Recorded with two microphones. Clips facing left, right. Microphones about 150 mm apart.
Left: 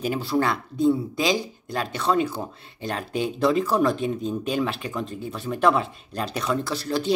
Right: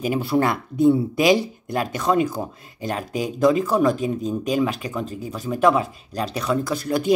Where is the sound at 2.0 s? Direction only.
10° right (ahead or behind).